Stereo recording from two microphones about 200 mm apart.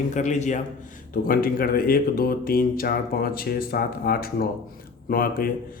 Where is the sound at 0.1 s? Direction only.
35° left (ahead or behind).